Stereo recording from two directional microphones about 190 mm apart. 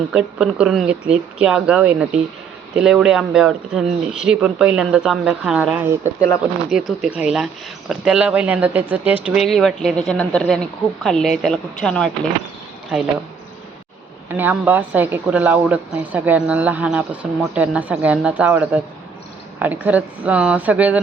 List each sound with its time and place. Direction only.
0.1 s speech: 5° right (ahead or behind)
6.1 s speech: 15° left (ahead or behind)
6.7 s speech: centre (ahead or behind)
14.3 s speech: 10° right (ahead or behind)